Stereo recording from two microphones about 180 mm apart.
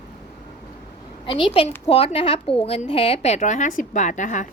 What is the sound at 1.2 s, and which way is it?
A woman's voice, 30° left (ahead or behind).